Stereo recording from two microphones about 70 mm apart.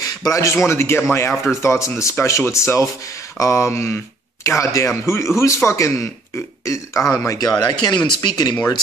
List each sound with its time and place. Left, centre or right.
0.0 s a man's voice: left
1.3 s speech: centre
1.6 s speech: left
7.3 s speech: left